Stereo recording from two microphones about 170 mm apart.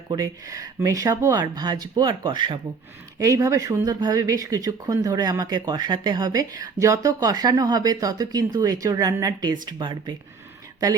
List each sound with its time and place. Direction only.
0.1 s speech: 20° right (ahead or behind)